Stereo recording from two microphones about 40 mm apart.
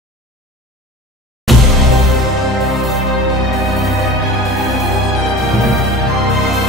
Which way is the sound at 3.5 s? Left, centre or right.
Centre.